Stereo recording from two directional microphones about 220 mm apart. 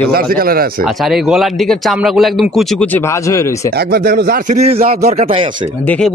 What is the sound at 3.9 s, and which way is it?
A man's voice, 40° right (ahead or behind).